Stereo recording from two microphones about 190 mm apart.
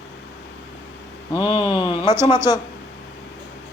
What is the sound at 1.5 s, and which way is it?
Speech, 30° left (ahead or behind).